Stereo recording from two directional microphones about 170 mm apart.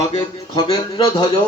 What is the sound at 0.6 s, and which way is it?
Speech, 25° left (ahead or behind).